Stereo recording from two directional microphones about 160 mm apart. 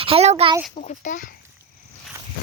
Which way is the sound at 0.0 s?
40° right (ahead or behind).